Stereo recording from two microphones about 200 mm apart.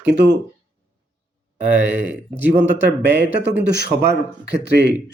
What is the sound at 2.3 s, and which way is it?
A man's voice, 65° right (ahead or behind).